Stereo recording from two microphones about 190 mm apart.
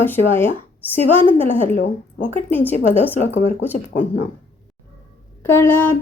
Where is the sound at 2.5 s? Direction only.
10° left (ahead or behind).